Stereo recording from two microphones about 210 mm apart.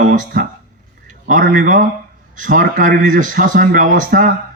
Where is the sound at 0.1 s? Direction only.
40° right (ahead or behind).